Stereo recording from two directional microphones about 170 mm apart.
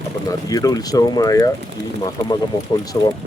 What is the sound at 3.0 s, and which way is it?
Speech, 25° left (ahead or behind).